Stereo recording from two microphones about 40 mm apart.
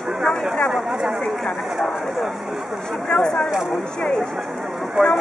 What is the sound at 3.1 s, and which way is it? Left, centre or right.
Speech, left.